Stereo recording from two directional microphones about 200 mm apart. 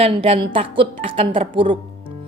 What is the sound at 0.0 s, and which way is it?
A woman's voice, 30° right (ahead or behind).